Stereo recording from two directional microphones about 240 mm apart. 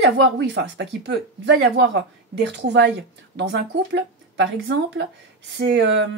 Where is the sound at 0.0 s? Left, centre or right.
Right.